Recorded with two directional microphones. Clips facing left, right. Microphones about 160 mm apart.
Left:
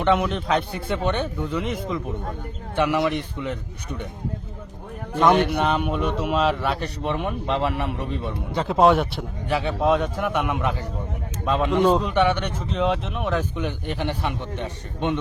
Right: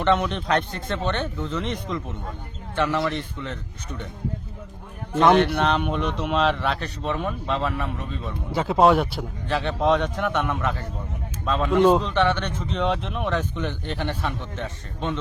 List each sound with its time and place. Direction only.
0.0 s speech: 5° left (ahead or behind)
5.3 s a man's voice: 5° left (ahead or behind); by 8.0 s 20° left (ahead or behind)
8.5 s a man's voice: centre (ahead or behind); by 15.2 s 15° left (ahead or behind)